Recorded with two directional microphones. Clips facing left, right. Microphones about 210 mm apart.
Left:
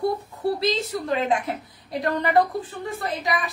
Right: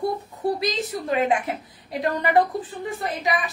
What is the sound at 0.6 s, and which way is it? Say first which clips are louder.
A woman's voice: left 2 dB; 15° right (ahead or behind).